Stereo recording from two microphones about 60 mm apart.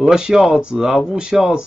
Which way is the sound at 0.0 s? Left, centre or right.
Centre.